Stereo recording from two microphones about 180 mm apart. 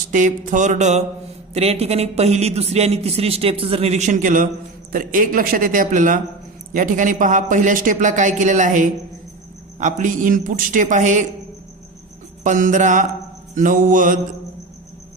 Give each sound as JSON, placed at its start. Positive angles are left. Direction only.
{"t": 0.1, "sound": "a man's voice", "side_deg": -45}
{"t": 12.4, "sound": "a man's voice", "side_deg": -45}